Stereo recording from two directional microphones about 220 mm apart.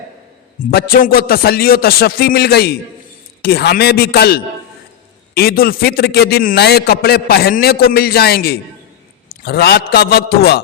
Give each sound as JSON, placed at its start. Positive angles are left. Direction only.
{"t": 0.7, "sound": "a man's voice", "side_deg": 45}